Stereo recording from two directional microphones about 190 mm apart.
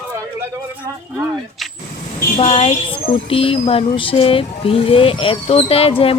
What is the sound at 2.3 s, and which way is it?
Speech, 30° left (ahead or behind).